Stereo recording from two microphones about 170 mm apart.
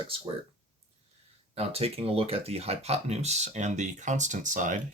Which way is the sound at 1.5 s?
35° right (ahead or behind).